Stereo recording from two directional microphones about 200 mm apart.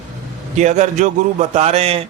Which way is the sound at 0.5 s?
35° right (ahead or behind).